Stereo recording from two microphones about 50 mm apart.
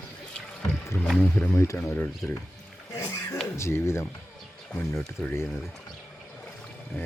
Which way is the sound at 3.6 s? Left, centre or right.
Left.